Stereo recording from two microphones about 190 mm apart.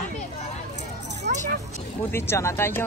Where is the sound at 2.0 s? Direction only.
10° left (ahead or behind).